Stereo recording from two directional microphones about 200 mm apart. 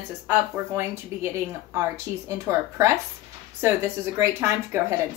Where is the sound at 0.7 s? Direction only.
15° right (ahead or behind).